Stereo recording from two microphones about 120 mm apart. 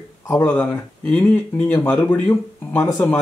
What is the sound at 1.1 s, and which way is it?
Speech, 15° left (ahead or behind).